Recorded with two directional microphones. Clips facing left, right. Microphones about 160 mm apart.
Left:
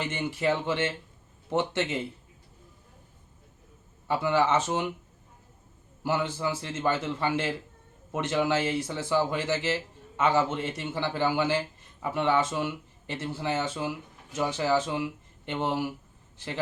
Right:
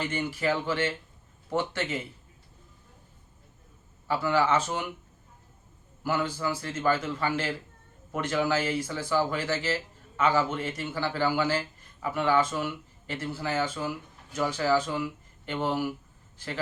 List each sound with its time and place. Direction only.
0.0 s speech: 20° left (ahead or behind)
4.1 s speech: 20° left (ahead or behind)
6.0 s speech: 20° left (ahead or behind)